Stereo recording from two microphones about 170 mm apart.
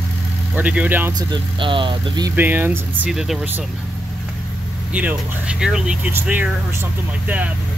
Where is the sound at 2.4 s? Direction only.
10° right (ahead or behind).